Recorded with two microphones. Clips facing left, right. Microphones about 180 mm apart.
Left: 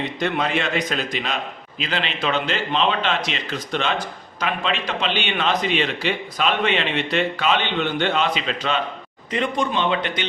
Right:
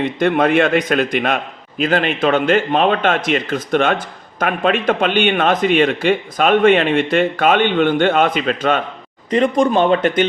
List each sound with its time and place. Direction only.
0.2 s a man's voice: 55° right (ahead or behind)